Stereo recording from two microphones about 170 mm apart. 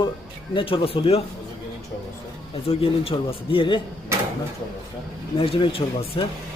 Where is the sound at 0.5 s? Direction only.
30° left (ahead or behind).